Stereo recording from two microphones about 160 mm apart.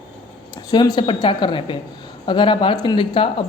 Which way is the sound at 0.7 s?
25° left (ahead or behind).